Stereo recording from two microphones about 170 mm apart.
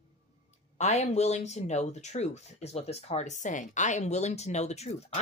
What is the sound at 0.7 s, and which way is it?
Speech, 40° left (ahead or behind).